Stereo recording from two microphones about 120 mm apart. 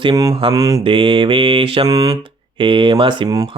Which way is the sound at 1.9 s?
30° right (ahead or behind).